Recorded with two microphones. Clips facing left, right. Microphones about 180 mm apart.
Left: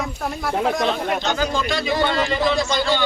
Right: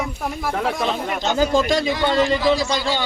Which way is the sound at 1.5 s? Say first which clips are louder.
Right 5 dB; 45° right (ahead or behind).